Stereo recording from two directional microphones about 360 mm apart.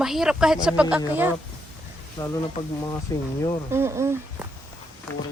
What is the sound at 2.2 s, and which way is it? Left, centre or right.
Speech, centre.